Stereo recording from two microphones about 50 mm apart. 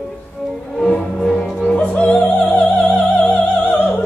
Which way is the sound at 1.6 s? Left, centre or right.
Left.